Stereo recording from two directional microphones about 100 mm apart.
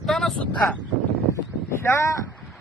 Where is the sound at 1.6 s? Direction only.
30° left (ahead or behind).